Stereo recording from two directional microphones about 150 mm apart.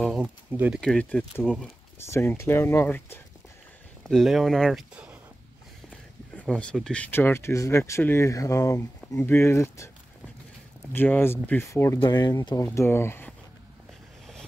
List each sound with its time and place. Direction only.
0.0 s a sound: 10° right (ahead or behind)
0.7 s speech: 5° left (ahead or behind)
2.0 s speech: 15° left (ahead or behind)
4.0 s speech: centre (ahead or behind)
6.3 s speech: 5° left (ahead or behind)
10.9 s speech: 15° left (ahead or behind)
12.6 s speech: 15° left (ahead or behind)